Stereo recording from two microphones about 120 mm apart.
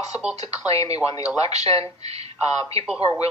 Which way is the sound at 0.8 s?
30° left (ahead or behind).